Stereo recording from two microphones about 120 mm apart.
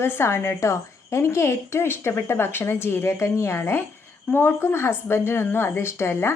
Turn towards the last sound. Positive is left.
turn(degrees=20)  # may be behind; listen again after turning